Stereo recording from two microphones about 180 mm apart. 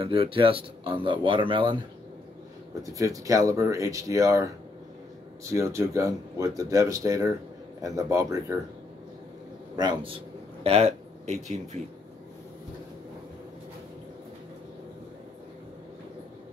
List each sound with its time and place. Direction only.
0.0 s speech: 30° right (ahead or behind)
2.8 s speech: 20° right (ahead or behind)
9.8 s speech: 25° right (ahead or behind)
10.6 s speech: 35° right (ahead or behind)